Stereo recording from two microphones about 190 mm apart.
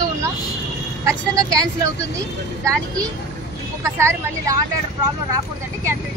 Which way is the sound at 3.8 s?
15° right (ahead or behind).